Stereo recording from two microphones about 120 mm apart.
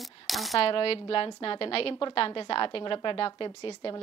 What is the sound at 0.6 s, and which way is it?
A woman's voice, 50° left (ahead or behind).